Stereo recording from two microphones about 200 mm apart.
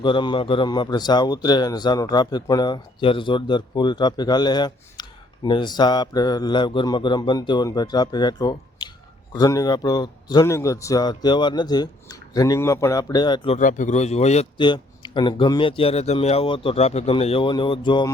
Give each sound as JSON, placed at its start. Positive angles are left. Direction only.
{"t": 0.0, "sound": "a man's voice", "side_deg": 25}
{"t": 13.6, "sound": "a man's voice", "side_deg": 40}